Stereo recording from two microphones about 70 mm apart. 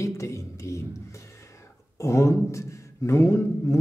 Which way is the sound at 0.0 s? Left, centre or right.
Left.